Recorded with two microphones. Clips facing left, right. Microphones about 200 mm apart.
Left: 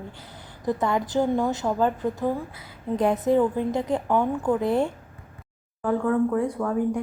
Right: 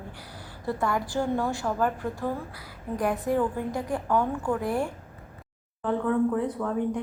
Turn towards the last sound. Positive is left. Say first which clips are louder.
# left 3 dB
turn(degrees=10)  # may be behind; listen again after turning